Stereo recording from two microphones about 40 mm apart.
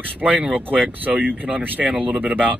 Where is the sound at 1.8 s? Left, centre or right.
Right.